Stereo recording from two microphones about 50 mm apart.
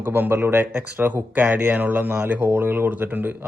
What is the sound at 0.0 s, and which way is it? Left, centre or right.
Speech, right.